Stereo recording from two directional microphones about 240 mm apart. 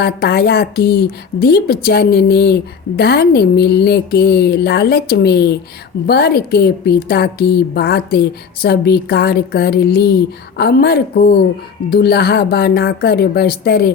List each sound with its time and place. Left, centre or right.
0.0 s speech: left